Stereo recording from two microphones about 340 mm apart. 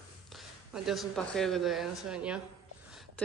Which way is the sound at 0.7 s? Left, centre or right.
Centre.